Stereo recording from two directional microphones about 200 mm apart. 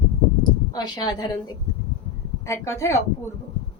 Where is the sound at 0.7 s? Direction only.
20° left (ahead or behind).